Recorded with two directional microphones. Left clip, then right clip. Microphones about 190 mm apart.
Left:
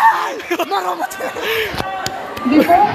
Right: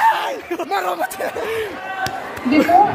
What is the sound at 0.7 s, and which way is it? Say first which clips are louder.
Speech: left 1 dB; 30° right (ahead or behind).